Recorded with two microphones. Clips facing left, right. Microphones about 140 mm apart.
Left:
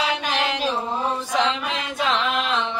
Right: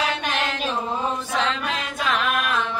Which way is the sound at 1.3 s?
20° left (ahead or behind).